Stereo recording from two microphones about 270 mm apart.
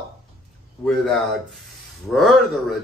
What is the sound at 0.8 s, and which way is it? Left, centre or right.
A man's voice, centre.